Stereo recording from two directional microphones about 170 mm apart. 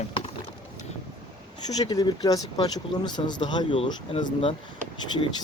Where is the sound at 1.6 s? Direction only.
25° left (ahead or behind).